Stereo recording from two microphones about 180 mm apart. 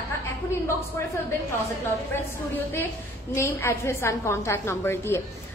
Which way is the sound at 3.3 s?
15° left (ahead or behind).